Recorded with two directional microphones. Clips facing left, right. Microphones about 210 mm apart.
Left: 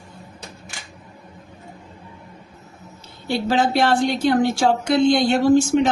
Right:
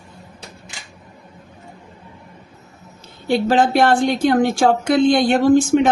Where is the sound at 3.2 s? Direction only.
50° right (ahead or behind).